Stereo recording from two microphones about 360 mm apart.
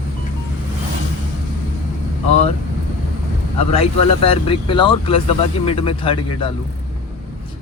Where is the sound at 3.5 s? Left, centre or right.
Centre.